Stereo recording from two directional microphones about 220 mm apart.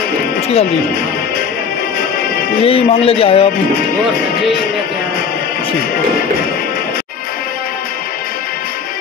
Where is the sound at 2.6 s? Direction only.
25° left (ahead or behind).